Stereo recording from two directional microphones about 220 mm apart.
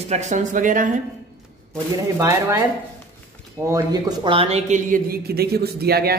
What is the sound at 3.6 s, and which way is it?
A man's voice, 15° right (ahead or behind).